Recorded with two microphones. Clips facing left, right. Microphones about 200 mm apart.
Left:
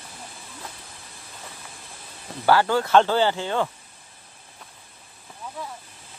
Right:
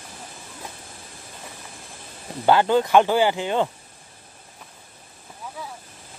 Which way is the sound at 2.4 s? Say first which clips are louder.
Right 2 dB; 20° right (ahead or behind).